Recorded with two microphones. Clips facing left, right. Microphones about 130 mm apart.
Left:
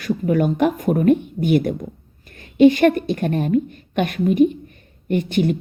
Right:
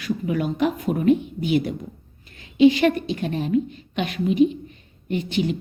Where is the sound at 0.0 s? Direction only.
50° left (ahead or behind).